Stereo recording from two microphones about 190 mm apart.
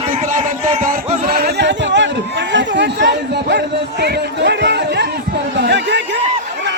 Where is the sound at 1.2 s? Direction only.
55° right (ahead or behind).